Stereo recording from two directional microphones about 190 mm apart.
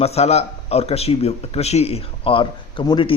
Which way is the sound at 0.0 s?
35° left (ahead or behind).